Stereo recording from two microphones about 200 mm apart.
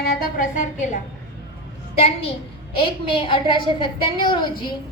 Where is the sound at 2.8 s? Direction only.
25° left (ahead or behind).